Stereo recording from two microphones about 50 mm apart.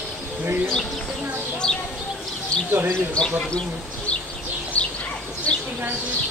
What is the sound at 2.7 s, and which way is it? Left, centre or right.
Speech, right.